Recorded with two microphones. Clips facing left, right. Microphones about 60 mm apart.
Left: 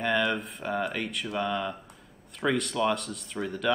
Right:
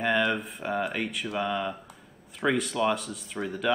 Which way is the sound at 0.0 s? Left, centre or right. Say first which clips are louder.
Right 1 dB; centre.